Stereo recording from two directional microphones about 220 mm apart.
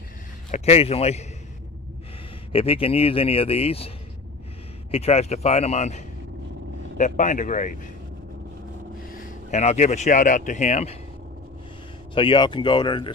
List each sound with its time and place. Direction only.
0.5 s speech: 30° left (ahead or behind)
2.5 s speech: 25° left (ahead or behind)
4.9 s speech: 30° left (ahead or behind)
9.1 s speech: 40° left (ahead or behind)
12.1 s speech: 20° left (ahead or behind)